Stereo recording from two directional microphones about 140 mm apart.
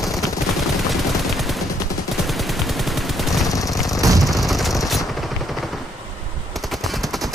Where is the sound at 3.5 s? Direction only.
25° left (ahead or behind).